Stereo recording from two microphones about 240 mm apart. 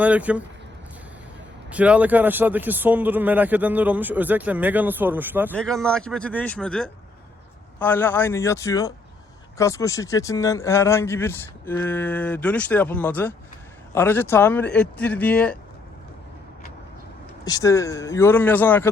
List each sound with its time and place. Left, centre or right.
0.0 s a man's voice: centre
1.7 s a man's voice: centre
5.5 s a man's voice: centre
17.4 s speech: centre